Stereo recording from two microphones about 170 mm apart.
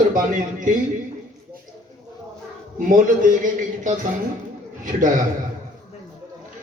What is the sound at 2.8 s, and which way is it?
Speech, 50° right (ahead or behind).